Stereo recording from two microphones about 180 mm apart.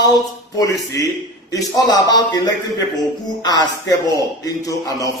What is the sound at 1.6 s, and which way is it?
Speech, 20° left (ahead or behind).